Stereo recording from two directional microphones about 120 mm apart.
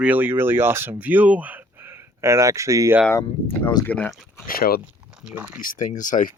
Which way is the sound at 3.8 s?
10° left (ahead or behind).